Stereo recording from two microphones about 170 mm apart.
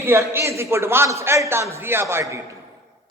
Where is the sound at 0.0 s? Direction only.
15° right (ahead or behind).